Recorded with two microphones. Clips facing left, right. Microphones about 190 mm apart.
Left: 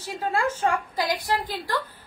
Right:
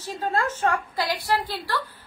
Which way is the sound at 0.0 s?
10° left (ahead or behind).